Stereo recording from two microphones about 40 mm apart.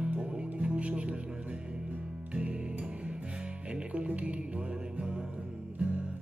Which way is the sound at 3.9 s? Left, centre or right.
Right.